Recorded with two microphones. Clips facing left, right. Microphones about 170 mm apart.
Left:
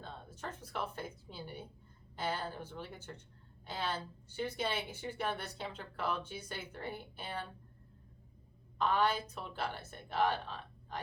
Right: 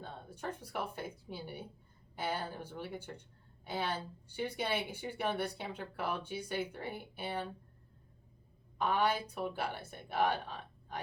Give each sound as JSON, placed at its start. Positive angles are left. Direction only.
{"t": 0.0, "sound": "a woman's voice", "side_deg": -10}
{"t": 8.8, "sound": "speech", "side_deg": -10}